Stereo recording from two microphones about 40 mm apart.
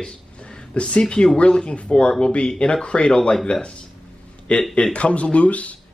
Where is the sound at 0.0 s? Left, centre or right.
Left.